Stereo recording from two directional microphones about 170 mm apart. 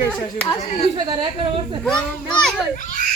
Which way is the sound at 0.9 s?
25° right (ahead or behind).